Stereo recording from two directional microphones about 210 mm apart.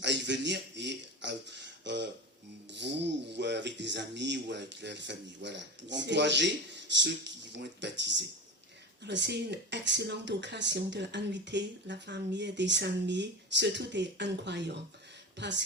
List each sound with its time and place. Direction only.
0.0 s speech: 55° right (ahead or behind)